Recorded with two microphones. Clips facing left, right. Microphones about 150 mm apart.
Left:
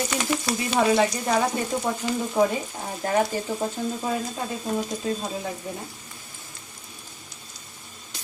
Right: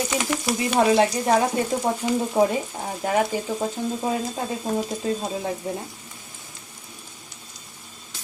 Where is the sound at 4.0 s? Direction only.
20° right (ahead or behind).